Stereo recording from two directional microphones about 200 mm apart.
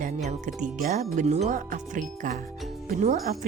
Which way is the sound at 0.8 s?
45° right (ahead or behind).